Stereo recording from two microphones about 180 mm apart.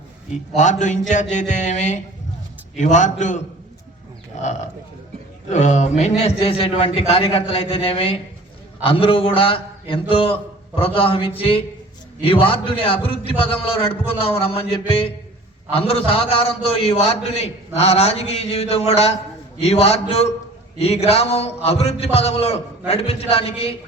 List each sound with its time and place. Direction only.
0.5 s a man's voice: 45° left (ahead or behind)
4.4 s a man's voice: 45° left (ahead or behind)